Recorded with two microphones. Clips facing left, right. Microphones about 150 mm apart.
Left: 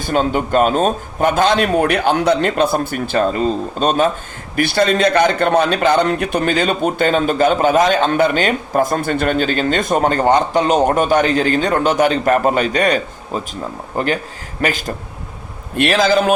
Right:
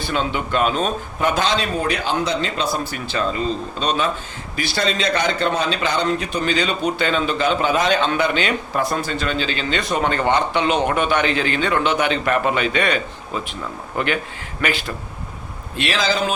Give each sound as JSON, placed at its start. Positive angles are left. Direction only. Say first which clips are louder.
{"t": 0.0, "sound": "a man's voice", "louder": "left 6 dB", "side_deg": 45}
{"t": 15.7, "sound": "a man's voice", "louder": "left 8 dB", "side_deg": 55}